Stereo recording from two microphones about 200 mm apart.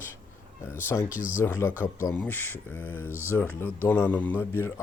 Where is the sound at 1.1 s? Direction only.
5° right (ahead or behind).